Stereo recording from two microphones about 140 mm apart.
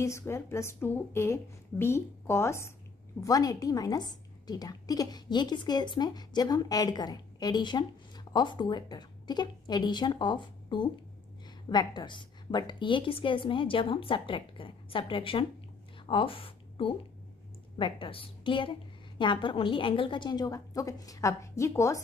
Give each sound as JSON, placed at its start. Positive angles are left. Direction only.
{"t": 0.0, "sound": "a woman's voice", "side_deg": 20}